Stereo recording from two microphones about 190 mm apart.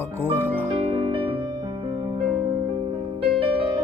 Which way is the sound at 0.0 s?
10° left (ahead or behind).